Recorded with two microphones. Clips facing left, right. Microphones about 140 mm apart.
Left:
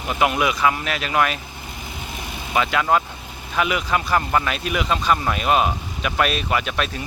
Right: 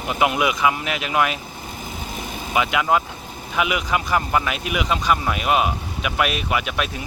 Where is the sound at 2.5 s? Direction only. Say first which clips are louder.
Even; 15° right (ahead or behind).